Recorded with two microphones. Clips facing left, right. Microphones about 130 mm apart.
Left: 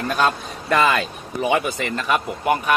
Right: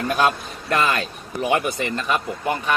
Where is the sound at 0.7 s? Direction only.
Centre (ahead or behind).